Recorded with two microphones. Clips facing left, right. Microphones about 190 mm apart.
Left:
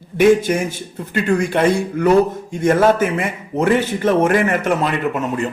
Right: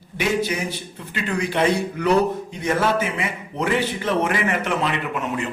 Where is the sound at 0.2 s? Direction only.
50° left (ahead or behind).